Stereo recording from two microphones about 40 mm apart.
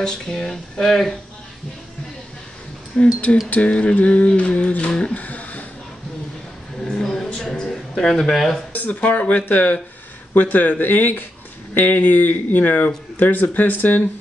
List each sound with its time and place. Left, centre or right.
0.0 s speech: centre
2.9 s speech: left
3.4 s speech: left
5.1 s a sound: left
6.8 s a sound: centre
7.7 s speech: centre
8.7 s speech: left